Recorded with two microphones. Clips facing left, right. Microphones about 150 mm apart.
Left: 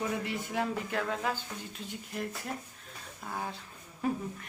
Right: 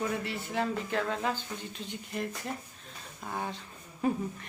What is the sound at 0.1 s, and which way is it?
A man's voice, 15° left (ahead or behind).